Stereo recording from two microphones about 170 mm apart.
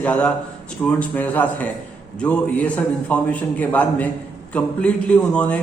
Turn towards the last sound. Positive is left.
turn(degrees=5)  # may be behind; listen again after turning